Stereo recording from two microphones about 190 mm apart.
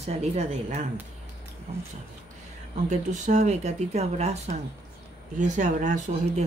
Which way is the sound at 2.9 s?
40° right (ahead or behind).